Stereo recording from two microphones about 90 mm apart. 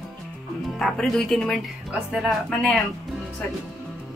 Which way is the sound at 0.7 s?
5° left (ahead or behind).